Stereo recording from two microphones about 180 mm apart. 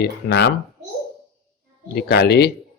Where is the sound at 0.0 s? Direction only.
65° left (ahead or behind).